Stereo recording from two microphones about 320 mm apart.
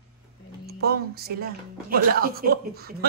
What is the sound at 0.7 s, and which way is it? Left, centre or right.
Speech, right.